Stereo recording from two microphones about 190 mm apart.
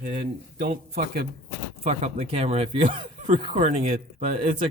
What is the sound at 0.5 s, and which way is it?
Speech, 50° right (ahead or behind).